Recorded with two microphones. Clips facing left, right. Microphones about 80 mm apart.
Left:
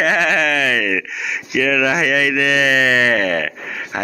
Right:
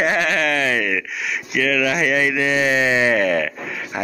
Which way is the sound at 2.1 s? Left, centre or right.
Left.